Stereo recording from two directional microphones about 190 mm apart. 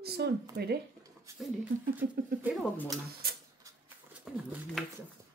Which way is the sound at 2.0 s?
60° right (ahead or behind).